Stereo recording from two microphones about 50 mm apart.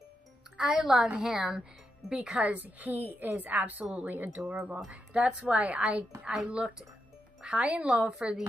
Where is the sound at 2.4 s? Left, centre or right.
Right.